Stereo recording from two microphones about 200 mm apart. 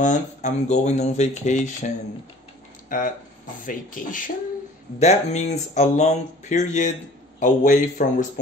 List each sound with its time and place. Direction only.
0.0 s speech: 35° left (ahead or behind)
2.9 s speech: 40° left (ahead or behind)